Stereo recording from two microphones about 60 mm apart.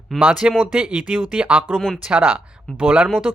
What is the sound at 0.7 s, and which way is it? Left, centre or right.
Speech, centre.